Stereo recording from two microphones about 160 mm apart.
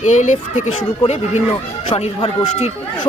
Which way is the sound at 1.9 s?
40° left (ahead or behind).